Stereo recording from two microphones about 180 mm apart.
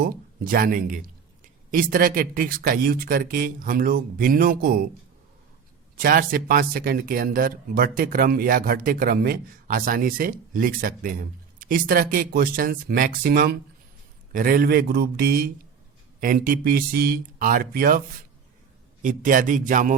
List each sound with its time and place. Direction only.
0.0 s speech: 50° right (ahead or behind)
6.0 s a man's voice: 50° right (ahead or behind)
19.0 s speech: 45° right (ahead or behind)